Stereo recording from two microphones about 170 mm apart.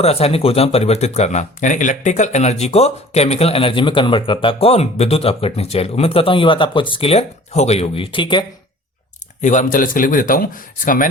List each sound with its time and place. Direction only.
0.0 s speech: 35° left (ahead or behind)
9.4 s speech: 45° left (ahead or behind)